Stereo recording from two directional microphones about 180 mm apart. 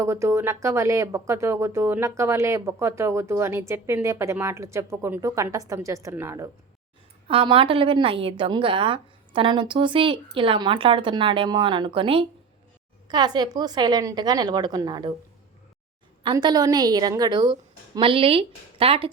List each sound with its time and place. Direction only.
0.0 s speech: 15° right (ahead or behind)
7.3 s a woman's voice: 30° right (ahead or behind)
16.2 s a woman's voice: 25° right (ahead or behind)